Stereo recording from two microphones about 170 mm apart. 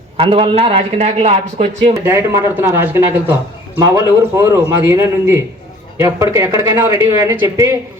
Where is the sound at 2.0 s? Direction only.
15° right (ahead or behind).